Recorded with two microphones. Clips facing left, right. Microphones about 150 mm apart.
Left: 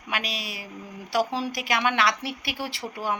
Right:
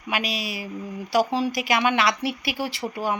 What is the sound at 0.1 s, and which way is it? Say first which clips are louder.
A woman's voice: right 4 dB; 5° right (ahead or behind).